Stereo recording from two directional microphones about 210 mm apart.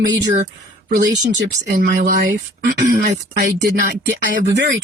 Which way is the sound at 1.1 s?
55° right (ahead or behind).